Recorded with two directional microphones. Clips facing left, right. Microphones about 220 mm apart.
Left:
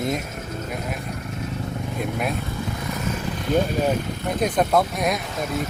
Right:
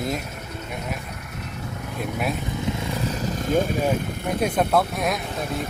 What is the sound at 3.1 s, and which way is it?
Vehicle, 40° right (ahead or behind).